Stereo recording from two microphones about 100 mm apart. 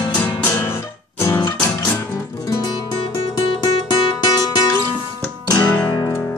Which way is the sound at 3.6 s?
45° left (ahead or behind).